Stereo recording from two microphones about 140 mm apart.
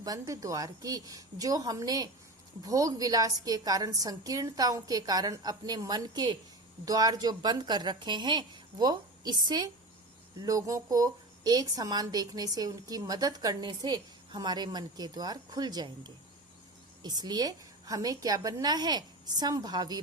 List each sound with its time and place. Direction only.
0.0 s a woman's voice: 25° right (ahead or behind)